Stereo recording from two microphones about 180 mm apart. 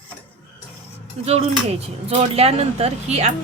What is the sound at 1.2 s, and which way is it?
Speech, 40° right (ahead or behind).